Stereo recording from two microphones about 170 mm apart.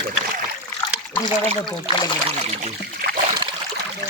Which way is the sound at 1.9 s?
30° right (ahead or behind).